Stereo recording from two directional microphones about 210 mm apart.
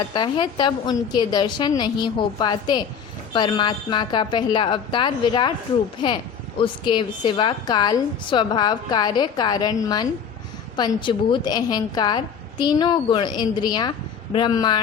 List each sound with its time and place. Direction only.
0.1 s a woman's voice: 20° left (ahead or behind)
6.6 s a woman's voice: 20° left (ahead or behind)